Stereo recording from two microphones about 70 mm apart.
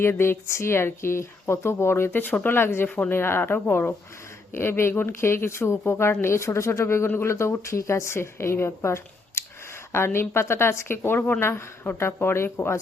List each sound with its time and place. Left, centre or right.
0.0 s speech: left